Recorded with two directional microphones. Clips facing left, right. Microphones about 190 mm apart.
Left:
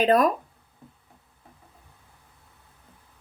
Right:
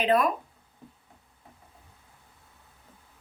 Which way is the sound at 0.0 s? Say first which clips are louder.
Left 4 dB; 40° left (ahead or behind).